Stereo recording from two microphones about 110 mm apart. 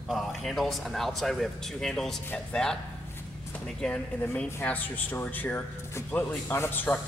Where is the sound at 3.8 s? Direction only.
10° left (ahead or behind).